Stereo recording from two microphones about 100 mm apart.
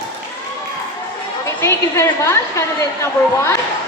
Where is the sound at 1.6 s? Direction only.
30° left (ahead or behind).